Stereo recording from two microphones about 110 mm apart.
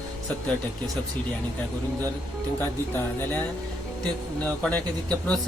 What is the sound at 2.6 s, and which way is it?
Speech, 20° left (ahead or behind).